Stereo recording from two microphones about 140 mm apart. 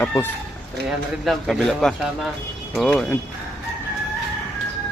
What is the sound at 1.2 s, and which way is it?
Speech, centre (ahead or behind).